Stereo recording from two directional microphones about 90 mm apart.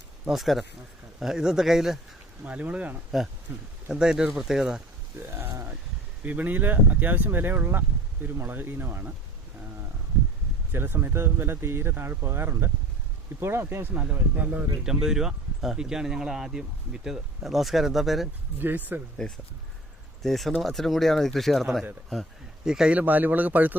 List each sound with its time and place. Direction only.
0.3 s speech: centre (ahead or behind)
2.4 s speech: 15° right (ahead or behind)
3.8 s speech: 10° right (ahead or behind)
5.2 s speech: 25° right (ahead or behind)
10.7 s speech: 25° right (ahead or behind)
13.9 s speech: 15° right (ahead or behind)
14.8 s speech: 5° right (ahead or behind)
18.6 s speech: 20° right (ahead or behind)
20.2 s speech: centre (ahead or behind)
23.0 s speech: 20° right (ahead or behind)